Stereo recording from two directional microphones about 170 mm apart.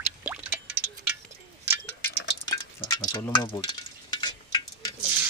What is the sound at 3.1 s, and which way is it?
Speech, 25° left (ahead or behind).